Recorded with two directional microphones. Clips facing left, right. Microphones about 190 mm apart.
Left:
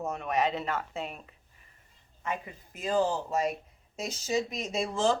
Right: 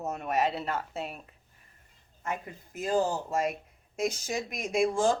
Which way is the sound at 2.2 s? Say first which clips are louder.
Even; 45° right (ahead or behind).